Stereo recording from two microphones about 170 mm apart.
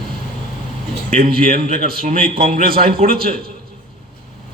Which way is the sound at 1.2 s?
55° right (ahead or behind).